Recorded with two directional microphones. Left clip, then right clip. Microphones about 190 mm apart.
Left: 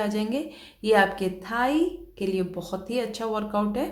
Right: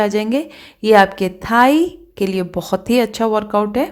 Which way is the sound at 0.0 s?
40° right (ahead or behind).